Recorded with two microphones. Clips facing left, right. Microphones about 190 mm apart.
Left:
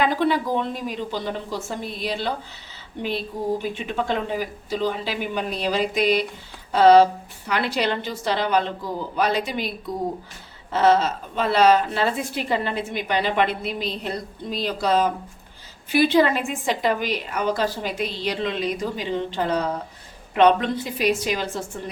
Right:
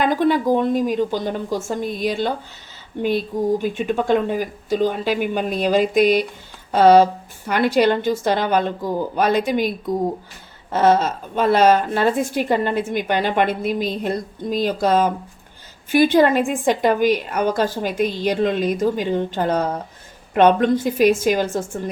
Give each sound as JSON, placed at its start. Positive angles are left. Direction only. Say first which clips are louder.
{"t": 0.0, "sound": "a woman's voice", "louder": "right 4 dB", "side_deg": -50}